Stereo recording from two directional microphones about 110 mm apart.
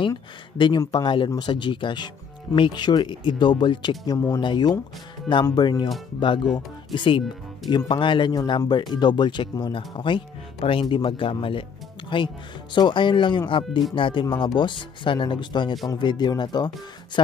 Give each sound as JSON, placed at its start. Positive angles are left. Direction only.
{"t": 0.6, "sound": "speech", "side_deg": 40}
{"t": 4.0, "sound": "speech", "side_deg": 35}